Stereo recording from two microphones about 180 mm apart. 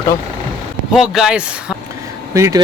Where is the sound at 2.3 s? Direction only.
15° right (ahead or behind).